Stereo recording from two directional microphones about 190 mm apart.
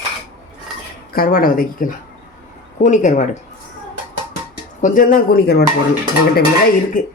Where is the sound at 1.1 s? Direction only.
50° left (ahead or behind).